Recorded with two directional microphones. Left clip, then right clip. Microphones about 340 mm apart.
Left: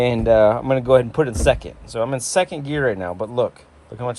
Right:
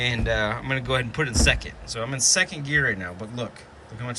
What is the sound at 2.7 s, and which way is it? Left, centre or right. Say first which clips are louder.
Speech: left 2 dB; centre.